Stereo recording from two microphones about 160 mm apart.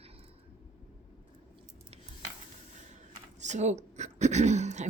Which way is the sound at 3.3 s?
45° right (ahead or behind).